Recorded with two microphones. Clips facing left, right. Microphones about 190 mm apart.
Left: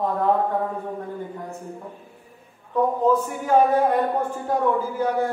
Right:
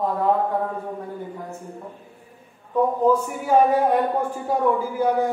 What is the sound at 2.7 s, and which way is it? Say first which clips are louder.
A man's voice: right 1 dB; 10° right (ahead or behind).